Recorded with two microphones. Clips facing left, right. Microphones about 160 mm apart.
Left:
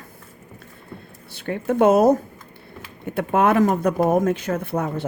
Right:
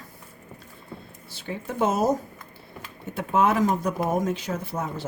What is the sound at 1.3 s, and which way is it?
Speech, 60° left (ahead or behind).